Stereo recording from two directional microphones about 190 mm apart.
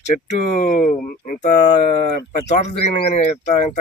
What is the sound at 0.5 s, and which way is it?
Speech, 45° left (ahead or behind).